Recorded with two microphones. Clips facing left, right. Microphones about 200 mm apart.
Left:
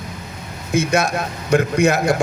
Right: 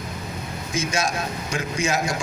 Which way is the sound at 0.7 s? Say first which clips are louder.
Left 7 dB; 60° left (ahead or behind).